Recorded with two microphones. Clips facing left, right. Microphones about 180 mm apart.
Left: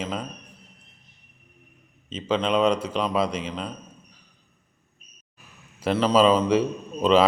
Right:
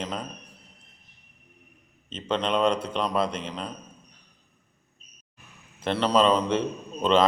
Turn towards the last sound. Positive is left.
turn(degrees=5)  # may be behind; listen again after turning